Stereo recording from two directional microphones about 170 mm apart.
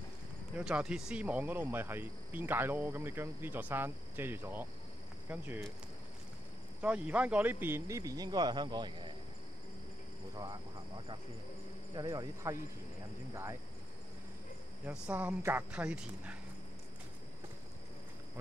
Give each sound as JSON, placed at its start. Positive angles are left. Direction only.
{"t": 0.6, "sound": "speech", "side_deg": -5}
{"t": 6.8, "sound": "speech", "side_deg": -10}
{"t": 10.3, "sound": "speech", "side_deg": -25}
{"t": 11.9, "sound": "speech", "side_deg": -25}
{"t": 14.9, "sound": "speech", "side_deg": -10}